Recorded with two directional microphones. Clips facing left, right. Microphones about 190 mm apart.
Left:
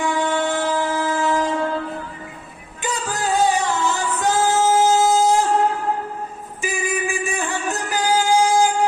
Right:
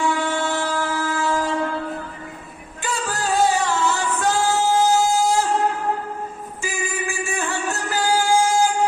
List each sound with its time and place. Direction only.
0.0 s train: 20° left (ahead or behind)
2.8 s music: 20° left (ahead or behind)
6.6 s music: 15° left (ahead or behind)